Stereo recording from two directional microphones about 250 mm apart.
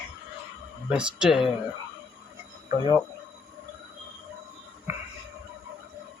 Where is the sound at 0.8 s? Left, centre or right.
Centre.